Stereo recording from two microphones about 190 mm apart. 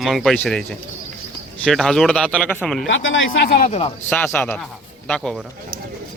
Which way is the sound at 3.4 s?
45° left (ahead or behind).